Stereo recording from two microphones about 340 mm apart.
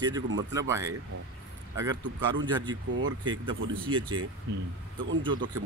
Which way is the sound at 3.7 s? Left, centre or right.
Centre.